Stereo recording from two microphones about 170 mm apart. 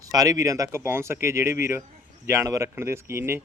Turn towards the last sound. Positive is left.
turn(degrees=-15)  # may be behind; listen again after turning